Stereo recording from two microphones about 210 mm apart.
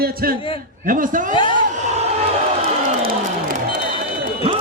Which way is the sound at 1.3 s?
25° left (ahead or behind).